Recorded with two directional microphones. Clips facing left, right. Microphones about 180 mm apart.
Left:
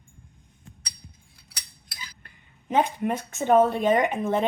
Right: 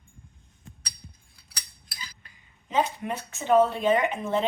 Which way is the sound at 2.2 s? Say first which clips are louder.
Left 11 dB; 55° left (ahead or behind).